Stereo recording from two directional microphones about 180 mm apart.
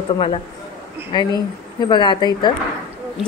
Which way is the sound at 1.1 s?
25° left (ahead or behind).